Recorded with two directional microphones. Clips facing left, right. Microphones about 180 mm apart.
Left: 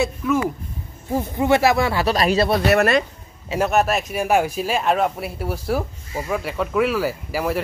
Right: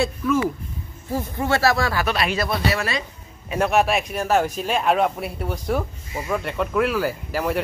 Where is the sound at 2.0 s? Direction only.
35° left (ahead or behind).